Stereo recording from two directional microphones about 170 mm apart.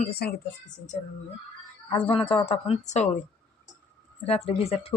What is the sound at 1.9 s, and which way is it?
A woman's voice, 35° left (ahead or behind).